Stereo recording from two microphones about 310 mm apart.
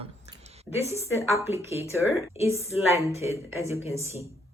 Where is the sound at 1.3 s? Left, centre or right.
Centre.